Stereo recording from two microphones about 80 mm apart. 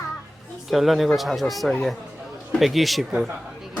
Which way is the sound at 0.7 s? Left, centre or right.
Centre.